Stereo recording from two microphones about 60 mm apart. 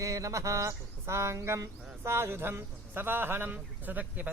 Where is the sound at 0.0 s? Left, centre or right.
Right.